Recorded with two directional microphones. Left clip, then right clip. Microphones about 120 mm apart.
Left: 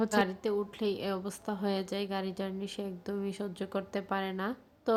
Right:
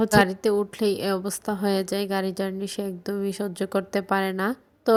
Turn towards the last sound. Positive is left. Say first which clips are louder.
# right 9 dB
turn(degrees=-55)  # may be behind; listen again after turning